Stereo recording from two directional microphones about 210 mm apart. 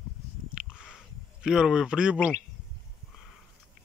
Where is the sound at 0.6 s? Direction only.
5° right (ahead or behind).